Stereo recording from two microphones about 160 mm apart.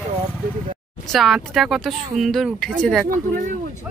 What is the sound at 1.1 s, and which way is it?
Speech, centre (ahead or behind).